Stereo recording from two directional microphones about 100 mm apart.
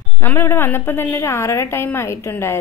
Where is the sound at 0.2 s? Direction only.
25° left (ahead or behind).